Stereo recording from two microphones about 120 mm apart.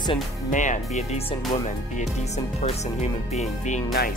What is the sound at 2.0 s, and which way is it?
Speech, 70° left (ahead or behind).